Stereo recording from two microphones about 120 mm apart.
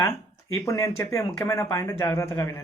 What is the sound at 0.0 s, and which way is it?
Speech, 25° left (ahead or behind).